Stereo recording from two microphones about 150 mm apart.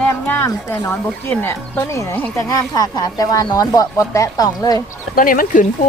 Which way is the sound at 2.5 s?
25° left (ahead or behind).